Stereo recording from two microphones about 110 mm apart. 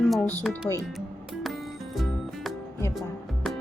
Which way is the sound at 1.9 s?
Centre (ahead or behind).